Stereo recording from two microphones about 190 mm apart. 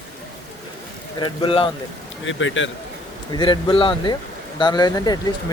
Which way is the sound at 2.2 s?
90° left.